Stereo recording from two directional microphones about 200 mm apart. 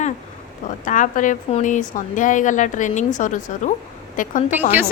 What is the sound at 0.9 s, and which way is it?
A woman's voice, 40° left (ahead or behind).